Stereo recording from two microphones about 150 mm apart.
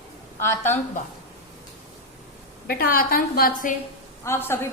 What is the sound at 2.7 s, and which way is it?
A woman's voice, 80° left.